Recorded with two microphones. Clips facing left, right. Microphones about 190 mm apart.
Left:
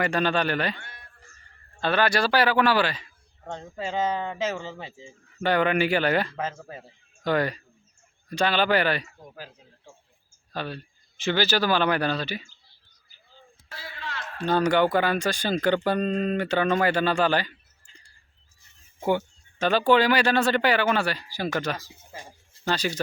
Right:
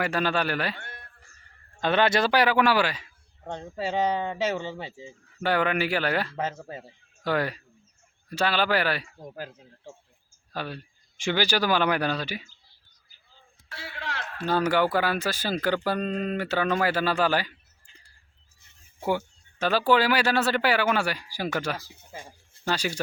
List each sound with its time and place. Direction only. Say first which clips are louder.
0.0 s speech: left 2 dB; 5° right (ahead or behind)
0.8 s music: right 3 dB; 55° right (ahead or behind)
1.8 s a man's voice: right 1 dB; 20° right (ahead or behind); by 6.3 s centre (ahead or behind)
6.3 s a man's voice: right 1 dB; 15° right (ahead or behind)
7.3 s a man's voice: left 2 dB; 5° right (ahead or behind)
10.5 s a man's voice: left 1 dB; 10° right (ahead or behind)
13.7 s a sound: right 1 dB; 70° right (ahead or behind)
14.4 s speech: left 2 dB; 5° right (ahead or behind)
19.5 s a man's voice: left 2 dB; 5° right (ahead or behind)